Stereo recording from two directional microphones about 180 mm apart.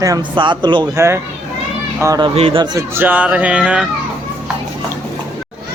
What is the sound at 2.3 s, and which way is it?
Speech, 30° right (ahead or behind).